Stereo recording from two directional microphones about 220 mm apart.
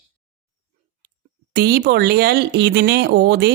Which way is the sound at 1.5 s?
45° right (ahead or behind).